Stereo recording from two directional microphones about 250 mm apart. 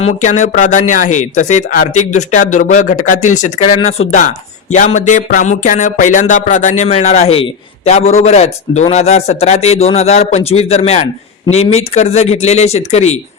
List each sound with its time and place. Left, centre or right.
0.0 s speech: left